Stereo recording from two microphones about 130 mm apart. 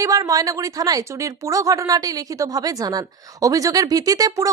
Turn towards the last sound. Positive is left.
turn(degrees=-25)  # may be behind; listen again after turning